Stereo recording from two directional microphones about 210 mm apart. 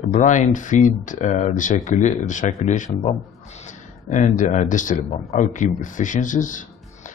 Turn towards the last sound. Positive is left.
turn(degrees=40)  # may be behind; listen again after turning